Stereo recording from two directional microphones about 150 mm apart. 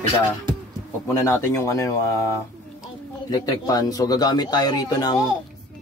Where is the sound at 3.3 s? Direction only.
25° left (ahead or behind).